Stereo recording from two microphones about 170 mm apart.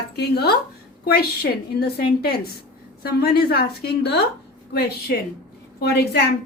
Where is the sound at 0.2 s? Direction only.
70° left (ahead or behind).